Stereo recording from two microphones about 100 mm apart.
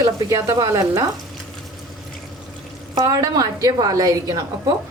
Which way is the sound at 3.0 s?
35° right (ahead or behind).